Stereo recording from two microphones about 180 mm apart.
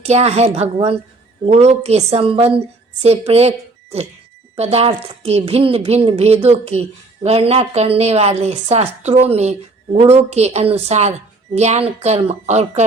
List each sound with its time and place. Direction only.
0.0 s a woman's voice: 35° right (ahead or behind)
4.5 s a woman's voice: 35° right (ahead or behind)